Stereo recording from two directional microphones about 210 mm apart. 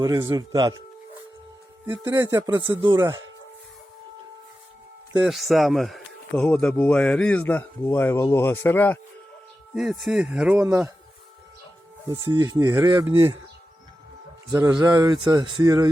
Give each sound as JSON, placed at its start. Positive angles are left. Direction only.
{"t": 0.0, "sound": "speech", "side_deg": -15}
{"t": 1.9, "sound": "speech", "side_deg": -15}
{"t": 5.2, "sound": "a man's voice", "side_deg": 0}
{"t": 9.7, "sound": "speech", "side_deg": 0}
{"t": 12.0, "sound": "speech", "side_deg": -20}
{"t": 14.8, "sound": "speech", "side_deg": -20}